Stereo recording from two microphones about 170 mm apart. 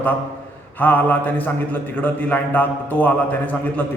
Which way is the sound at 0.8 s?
10° left (ahead or behind).